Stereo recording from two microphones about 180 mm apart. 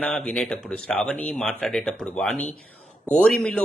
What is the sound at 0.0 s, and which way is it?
A man's voice, 5° left (ahead or behind).